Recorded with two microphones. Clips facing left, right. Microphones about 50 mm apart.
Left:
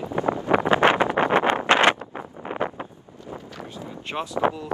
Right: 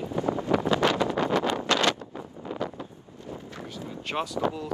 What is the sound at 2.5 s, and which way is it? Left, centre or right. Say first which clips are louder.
Wind noise: left 5 dB; left.